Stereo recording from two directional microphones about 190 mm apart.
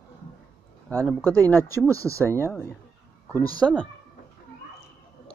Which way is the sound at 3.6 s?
5° left (ahead or behind).